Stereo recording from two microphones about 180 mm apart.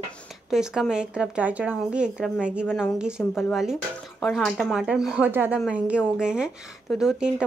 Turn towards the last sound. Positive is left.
turn(degrees=0)  # may be behind; listen again after turning